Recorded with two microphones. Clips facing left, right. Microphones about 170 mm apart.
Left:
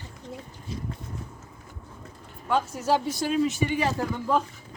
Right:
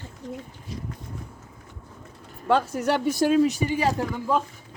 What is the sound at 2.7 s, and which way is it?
Speech, 65° right (ahead or behind).